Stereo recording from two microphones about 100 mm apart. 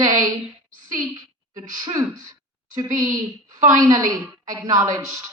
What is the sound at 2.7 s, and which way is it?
A woman's voice, 40° right (ahead or behind).